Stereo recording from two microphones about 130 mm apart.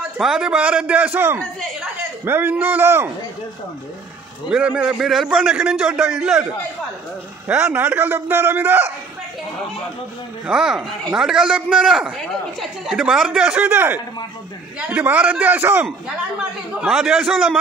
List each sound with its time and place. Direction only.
0.2 s a man's voice: 5° right (ahead or behind)
4.5 s a man's voice: 10° right (ahead or behind)
7.4 s a man's voice: 10° right (ahead or behind)
10.4 s a man's voice: 5° right (ahead or behind)